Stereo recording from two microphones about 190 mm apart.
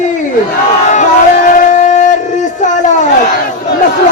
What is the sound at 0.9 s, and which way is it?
Crowd, 40° left (ahead or behind).